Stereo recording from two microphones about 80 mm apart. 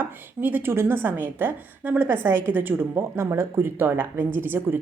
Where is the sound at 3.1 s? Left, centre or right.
Right.